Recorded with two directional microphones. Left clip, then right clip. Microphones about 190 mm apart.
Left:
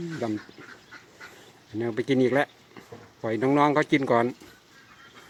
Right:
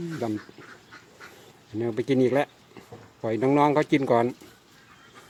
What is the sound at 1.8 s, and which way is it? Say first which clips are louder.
Speech: right 1 dB; 10° right (ahead or behind).